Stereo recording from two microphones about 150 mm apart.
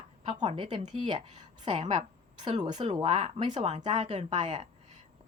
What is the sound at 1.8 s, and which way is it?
Speech, 40° right (ahead or behind).